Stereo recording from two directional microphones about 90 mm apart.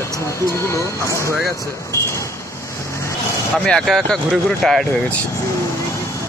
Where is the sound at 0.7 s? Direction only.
35° left (ahead or behind).